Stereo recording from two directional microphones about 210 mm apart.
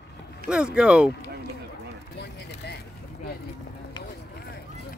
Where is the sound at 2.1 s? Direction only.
50° left (ahead or behind).